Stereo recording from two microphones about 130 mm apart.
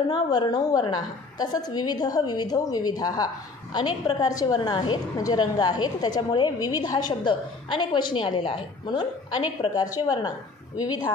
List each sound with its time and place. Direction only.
0.1 s a woman's voice: 35° left (ahead or behind)